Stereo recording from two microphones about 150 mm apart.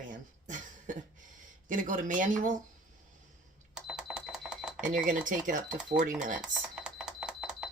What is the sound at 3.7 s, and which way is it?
Cash register, 5° right (ahead or behind).